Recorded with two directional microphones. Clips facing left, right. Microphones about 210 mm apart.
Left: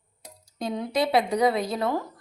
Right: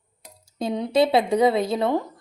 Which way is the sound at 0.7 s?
25° right (ahead or behind).